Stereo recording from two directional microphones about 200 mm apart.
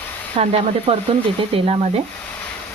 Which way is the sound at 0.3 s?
30° right (ahead or behind).